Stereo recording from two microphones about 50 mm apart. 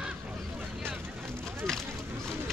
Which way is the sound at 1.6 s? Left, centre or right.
Centre.